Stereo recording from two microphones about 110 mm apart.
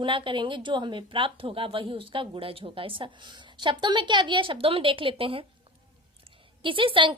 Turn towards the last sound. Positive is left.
turn(degrees=-50)  # may be behind; listen again after turning